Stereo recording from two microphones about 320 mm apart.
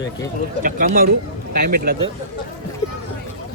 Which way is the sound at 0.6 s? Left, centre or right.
Right.